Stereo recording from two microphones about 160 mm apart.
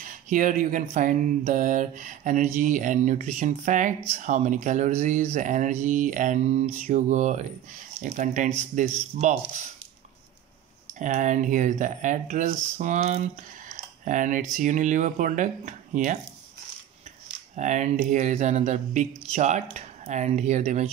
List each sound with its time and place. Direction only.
0.0 s speech: 55° right (ahead or behind)
11.0 s speech: 55° right (ahead or behind)
17.6 s speech: 50° right (ahead or behind)